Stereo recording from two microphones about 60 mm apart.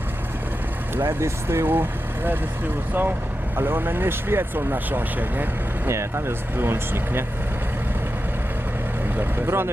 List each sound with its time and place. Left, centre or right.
1.0 s speech: right
1.6 s speech: right
3.5 s speech: right
5.9 s speech: right
9.1 s speech: right